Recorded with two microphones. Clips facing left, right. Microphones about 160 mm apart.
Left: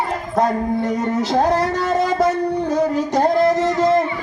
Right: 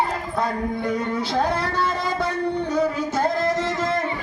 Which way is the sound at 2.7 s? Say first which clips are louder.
Left 5 dB; 40° left (ahead or behind).